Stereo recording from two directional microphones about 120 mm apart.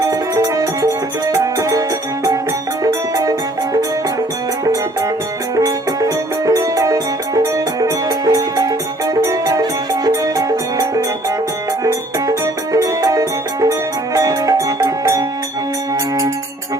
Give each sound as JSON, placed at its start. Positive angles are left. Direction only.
{"t": 0.0, "sound": "music", "side_deg": -30}
{"t": 2.8, "sound": "music", "side_deg": -25}
{"t": 5.5, "sound": "music", "side_deg": -30}
{"t": 12.7, "sound": "music", "side_deg": -25}